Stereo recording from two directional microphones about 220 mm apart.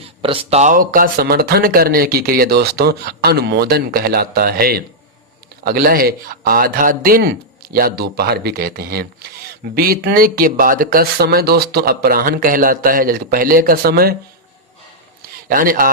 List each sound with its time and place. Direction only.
0.0 s a man's voice: 25° right (ahead or behind); by 14.2 s 45° right (ahead or behind)
15.4 s a man's voice: 40° right (ahead or behind)